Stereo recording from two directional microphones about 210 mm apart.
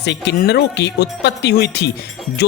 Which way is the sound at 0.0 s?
55° left (ahead or behind).